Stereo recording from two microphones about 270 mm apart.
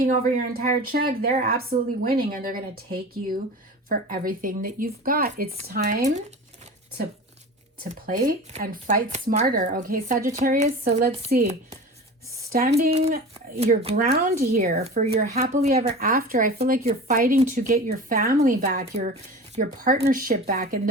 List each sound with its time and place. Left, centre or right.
0.0 s speech: right
7.9 s speech: right
13.3 s speech: right